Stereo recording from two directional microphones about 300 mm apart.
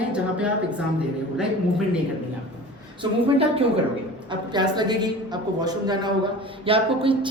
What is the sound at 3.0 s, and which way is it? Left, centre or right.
A woman's voice, centre.